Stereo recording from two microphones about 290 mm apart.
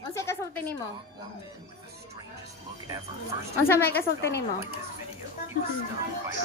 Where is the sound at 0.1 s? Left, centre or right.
Centre.